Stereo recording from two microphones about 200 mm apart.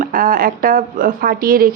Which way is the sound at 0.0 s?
45° right (ahead or behind).